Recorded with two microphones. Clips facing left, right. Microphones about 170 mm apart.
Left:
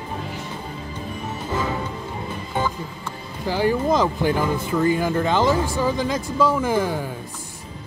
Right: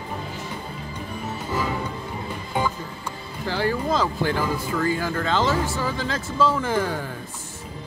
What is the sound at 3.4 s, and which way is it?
Speech, 15° left (ahead or behind).